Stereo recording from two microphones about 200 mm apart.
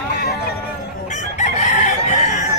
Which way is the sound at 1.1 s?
35° left (ahead or behind).